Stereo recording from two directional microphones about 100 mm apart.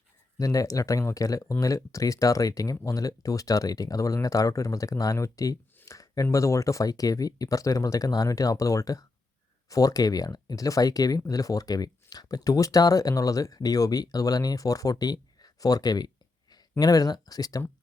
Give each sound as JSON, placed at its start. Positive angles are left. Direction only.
{"t": 0.3, "sound": "speech", "side_deg": 35}